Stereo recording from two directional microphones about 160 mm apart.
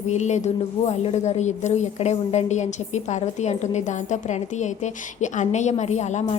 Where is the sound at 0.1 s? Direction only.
45° left (ahead or behind).